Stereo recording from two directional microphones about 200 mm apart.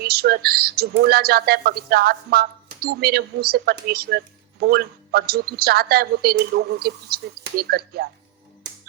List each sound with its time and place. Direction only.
0.0 s speech: 50° right (ahead or behind)